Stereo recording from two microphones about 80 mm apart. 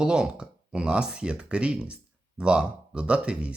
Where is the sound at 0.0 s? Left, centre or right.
Centre.